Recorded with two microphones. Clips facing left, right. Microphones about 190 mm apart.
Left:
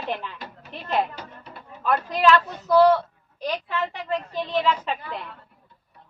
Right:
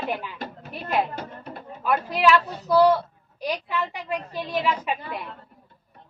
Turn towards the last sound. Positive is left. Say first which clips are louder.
# right 1 dB
turn(degrees=-10)  # may be behind; listen again after turning